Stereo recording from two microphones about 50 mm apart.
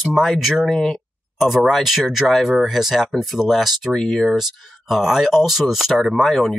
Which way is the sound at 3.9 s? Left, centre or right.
Centre.